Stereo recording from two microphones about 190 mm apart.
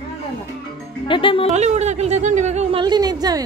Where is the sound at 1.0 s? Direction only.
25° left (ahead or behind).